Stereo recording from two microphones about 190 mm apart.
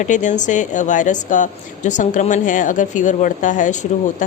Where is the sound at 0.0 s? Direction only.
40° left (ahead or behind).